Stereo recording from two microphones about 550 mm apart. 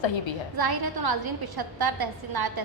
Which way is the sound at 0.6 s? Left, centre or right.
Right.